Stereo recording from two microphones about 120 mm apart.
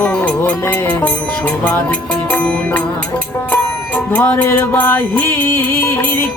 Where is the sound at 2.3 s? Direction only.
10° left (ahead or behind).